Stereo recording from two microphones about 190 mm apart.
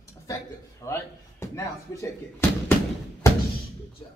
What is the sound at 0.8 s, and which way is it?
Speech, 15° left (ahead or behind).